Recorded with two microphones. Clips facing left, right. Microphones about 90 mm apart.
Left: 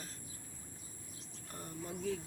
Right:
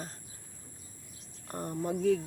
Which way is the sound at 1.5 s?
55° right (ahead or behind).